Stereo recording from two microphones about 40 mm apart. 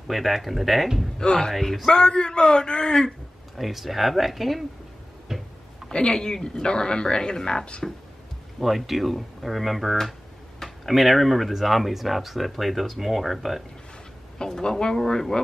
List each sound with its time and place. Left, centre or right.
0.1 s speech: centre
1.2 s speech: centre
1.5 s speech: centre
1.9 s speech: centre
3.5 s speech: centre
5.3 s tick-tock: centre
5.9 s speech: centre
8.5 s speech: centre
14.4 s speech: centre